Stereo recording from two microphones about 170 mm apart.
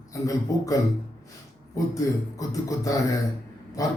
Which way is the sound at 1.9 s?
20° left (ahead or behind).